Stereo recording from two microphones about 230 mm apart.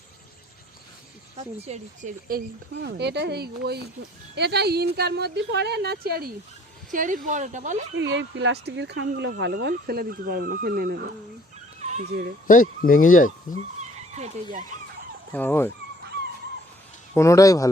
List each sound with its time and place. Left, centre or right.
1.5 s speech: right
7.9 s speech: right
11.8 s dog: right
12.5 s speech: left
15.3 s speech: centre
17.2 s speech: centre